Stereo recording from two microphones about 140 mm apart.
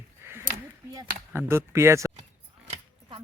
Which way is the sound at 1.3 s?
15° right (ahead or behind).